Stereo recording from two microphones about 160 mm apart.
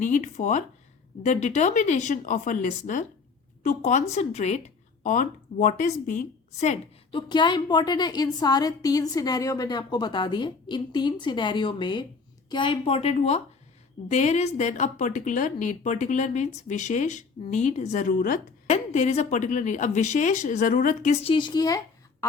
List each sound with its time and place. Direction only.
0.0 s a woman's voice: 50° left (ahead or behind)
7.1 s a woman's voice: 30° left (ahead or behind); by 18.8 s 55° left (ahead or behind)
18.9 s a woman's voice: 45° left (ahead or behind)
21.1 s a woman's voice: 40° left (ahead or behind)